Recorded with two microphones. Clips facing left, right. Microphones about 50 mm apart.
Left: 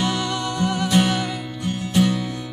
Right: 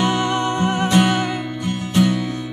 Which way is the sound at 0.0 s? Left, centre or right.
Right.